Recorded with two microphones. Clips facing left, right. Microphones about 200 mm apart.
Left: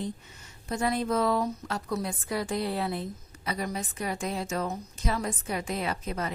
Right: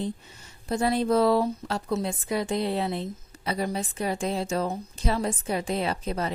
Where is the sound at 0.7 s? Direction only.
30° right (ahead or behind).